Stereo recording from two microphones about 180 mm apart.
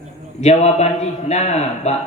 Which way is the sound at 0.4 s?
35° left (ahead or behind).